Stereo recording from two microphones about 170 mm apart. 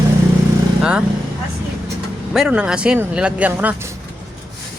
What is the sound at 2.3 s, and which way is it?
Speech, 5° right (ahead or behind).